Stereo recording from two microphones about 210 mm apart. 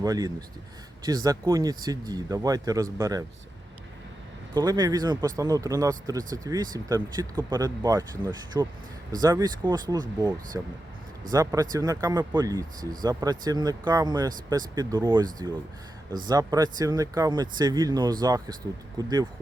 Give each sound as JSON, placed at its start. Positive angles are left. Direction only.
{"t": 0.0, "sound": "speech", "side_deg": -15}
{"t": 4.5, "sound": "speech", "side_deg": -20}